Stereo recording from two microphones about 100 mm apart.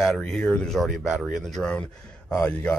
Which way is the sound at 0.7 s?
5° right (ahead or behind).